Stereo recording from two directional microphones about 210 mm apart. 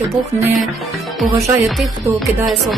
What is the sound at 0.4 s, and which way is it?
Music, centre (ahead or behind).